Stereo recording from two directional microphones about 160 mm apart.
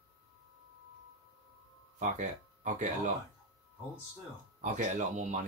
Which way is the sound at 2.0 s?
50° right (ahead or behind).